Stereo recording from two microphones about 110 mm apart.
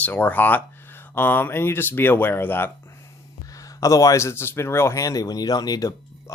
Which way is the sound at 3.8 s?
30° left (ahead or behind).